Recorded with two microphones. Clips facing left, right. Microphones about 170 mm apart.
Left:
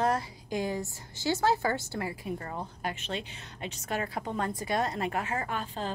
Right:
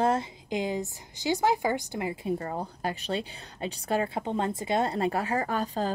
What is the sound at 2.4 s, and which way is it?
Speech, 35° right (ahead or behind).